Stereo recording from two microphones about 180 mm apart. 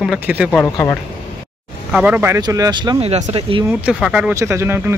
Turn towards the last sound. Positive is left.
turn(degrees=-15)  # may be behind; listen again after turning